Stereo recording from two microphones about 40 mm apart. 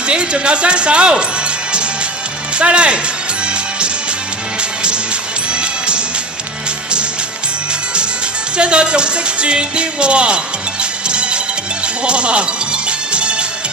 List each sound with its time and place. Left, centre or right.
0.0 s speech: right
3.4 s music: right
5.5 s music: right
7.7 s music: right